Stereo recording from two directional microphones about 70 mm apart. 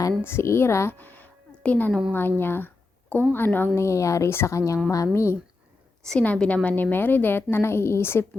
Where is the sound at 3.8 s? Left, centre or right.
Left.